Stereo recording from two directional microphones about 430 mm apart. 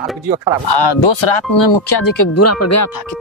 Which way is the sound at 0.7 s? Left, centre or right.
Left.